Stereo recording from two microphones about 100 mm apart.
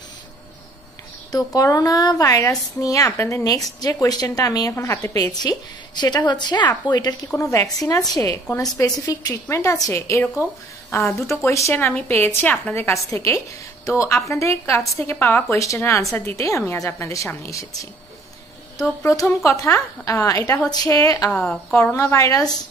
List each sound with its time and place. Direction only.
1.3 s a woman's voice: 40° left (ahead or behind)
3.1 s a woman's voice: 25° left (ahead or behind); by 7.2 s 40° left (ahead or behind)
7.3 s a woman's voice: 30° left (ahead or behind)
19.0 s a woman's voice: 30° left (ahead or behind)
21.3 s a woman's voice: 10° left (ahead or behind)
21.9 s a woman's voice: 30° left (ahead or behind)